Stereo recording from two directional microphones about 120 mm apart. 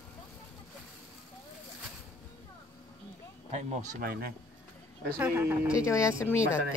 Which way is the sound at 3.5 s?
75° right (ahead or behind).